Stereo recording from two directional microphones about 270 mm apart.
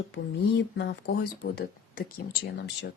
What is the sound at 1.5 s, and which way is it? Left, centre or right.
A woman's voice, left.